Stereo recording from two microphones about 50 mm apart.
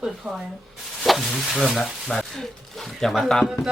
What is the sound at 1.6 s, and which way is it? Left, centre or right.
Speech, centre.